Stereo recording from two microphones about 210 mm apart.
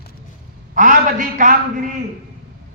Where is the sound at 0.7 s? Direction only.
40° right (ahead or behind).